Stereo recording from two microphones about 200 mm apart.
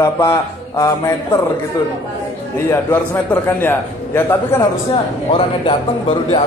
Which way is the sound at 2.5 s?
10° left (ahead or behind).